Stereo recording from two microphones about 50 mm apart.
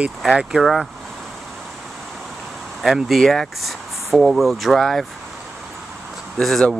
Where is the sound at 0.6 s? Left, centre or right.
Centre.